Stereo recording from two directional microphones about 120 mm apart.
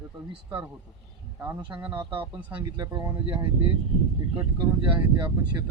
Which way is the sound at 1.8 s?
40° right (ahead or behind).